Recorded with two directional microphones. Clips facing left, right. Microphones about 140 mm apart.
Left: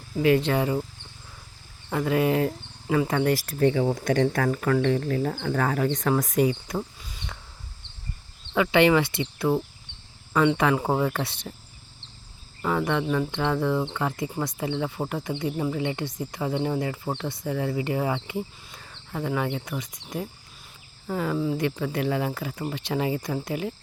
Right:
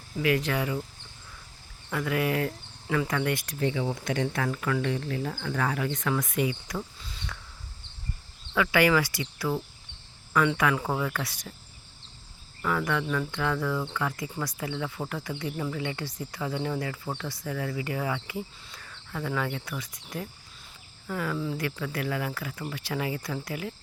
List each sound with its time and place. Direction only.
0.2 s speech: 30° left (ahead or behind)
1.9 s speech: 30° left (ahead or behind)
7.0 s a sound: 15° left (ahead or behind)
8.5 s speech: 25° left (ahead or behind)
12.6 s speech: 25° left (ahead or behind)